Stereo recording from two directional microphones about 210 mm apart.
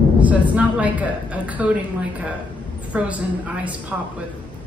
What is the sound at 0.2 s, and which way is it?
A woman's voice, 5° right (ahead or behind).